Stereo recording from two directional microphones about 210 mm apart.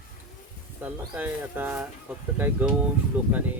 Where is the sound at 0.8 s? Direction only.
10° right (ahead or behind).